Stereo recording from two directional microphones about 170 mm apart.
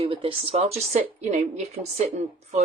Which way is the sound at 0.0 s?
30° right (ahead or behind).